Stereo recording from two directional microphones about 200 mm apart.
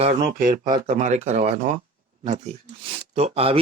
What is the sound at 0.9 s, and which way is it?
Speech, 35° right (ahead or behind).